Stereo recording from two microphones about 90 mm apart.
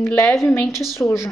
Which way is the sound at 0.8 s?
30° left (ahead or behind).